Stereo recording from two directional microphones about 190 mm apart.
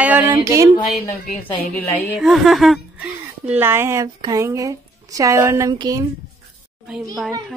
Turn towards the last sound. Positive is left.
turn(degrees=0)  # may be behind; listen again after turning